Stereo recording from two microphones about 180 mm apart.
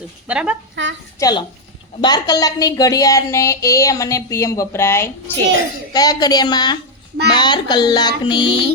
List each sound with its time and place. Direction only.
0.3 s a woman's voice: 5° right (ahead or behind)
0.8 s a woman's voice: 90° right
1.2 s music: 20° left (ahead or behind)
2.0 s a woman's voice: 25° left (ahead or behind)
5.9 s music: 20° left (ahead or behind)